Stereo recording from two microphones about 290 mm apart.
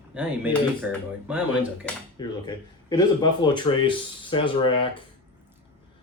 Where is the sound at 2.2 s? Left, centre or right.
Centre.